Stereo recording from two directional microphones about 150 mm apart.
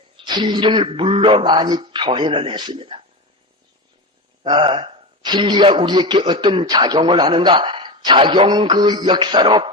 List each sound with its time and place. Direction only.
0.2 s a man's voice: 30° right (ahead or behind)
4.4 s a man's voice: 30° right (ahead or behind)